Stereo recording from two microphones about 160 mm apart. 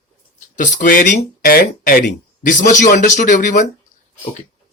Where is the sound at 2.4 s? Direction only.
50° left (ahead or behind).